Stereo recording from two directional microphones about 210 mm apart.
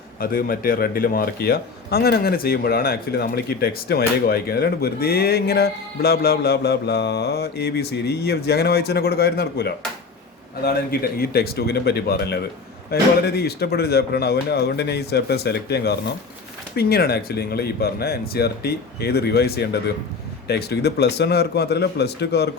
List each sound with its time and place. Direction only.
0.2 s a man's voice: 45° left (ahead or behind)